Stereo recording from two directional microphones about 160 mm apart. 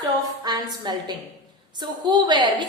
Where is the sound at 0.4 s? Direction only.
25° right (ahead or behind).